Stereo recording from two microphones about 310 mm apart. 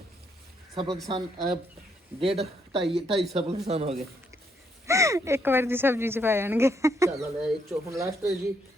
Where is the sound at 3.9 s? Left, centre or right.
Centre.